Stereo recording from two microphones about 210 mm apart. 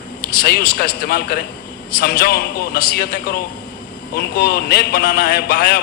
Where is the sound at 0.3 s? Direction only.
45° left (ahead or behind).